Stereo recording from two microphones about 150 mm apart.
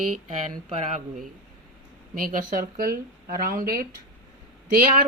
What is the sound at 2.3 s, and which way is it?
Speech, 80° right.